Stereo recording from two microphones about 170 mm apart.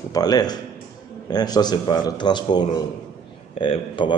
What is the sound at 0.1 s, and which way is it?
A man's voice, 25° left (ahead or behind).